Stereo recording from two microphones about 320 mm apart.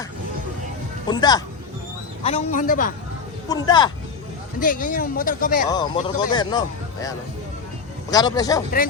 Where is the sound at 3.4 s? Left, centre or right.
Centre.